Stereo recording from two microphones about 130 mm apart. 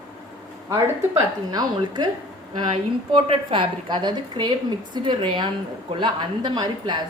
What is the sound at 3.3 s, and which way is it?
A woman's voice, 40° right (ahead or behind).